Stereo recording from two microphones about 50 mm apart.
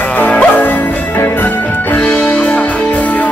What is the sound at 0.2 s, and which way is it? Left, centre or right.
Music, left.